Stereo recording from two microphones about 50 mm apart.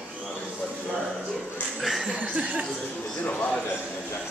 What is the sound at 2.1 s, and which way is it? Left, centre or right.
Chuckle, right.